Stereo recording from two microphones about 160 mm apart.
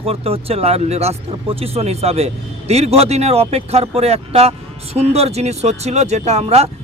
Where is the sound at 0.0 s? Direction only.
40° right (ahead or behind).